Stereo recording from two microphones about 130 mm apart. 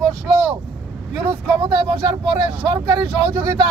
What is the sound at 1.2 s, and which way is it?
Speech, 35° right (ahead or behind).